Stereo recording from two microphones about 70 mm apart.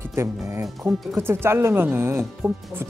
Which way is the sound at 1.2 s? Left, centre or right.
Right.